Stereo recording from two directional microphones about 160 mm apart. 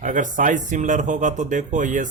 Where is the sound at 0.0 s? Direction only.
55° right (ahead or behind).